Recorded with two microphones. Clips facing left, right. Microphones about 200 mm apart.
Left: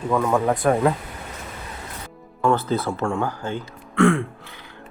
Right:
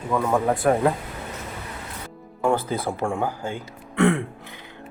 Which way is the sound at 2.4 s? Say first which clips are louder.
Left 2 dB; 10° right (ahead or behind).